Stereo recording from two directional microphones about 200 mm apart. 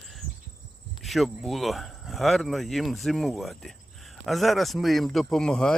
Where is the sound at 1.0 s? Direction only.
Centre (ahead or behind).